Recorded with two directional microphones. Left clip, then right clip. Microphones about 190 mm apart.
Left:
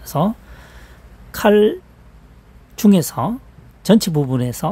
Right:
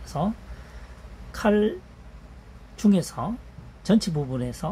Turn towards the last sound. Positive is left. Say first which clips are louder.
# left 9 dB
turn(degrees=75)  # may be behind; listen again after turning